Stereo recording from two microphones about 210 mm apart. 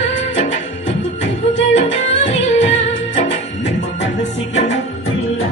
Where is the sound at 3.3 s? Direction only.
35° left (ahead or behind).